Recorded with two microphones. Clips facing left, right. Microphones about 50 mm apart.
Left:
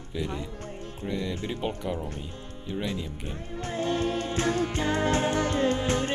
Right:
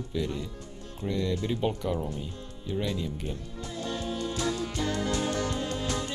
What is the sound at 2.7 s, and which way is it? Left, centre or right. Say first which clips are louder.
Speech: right 1 dB; left.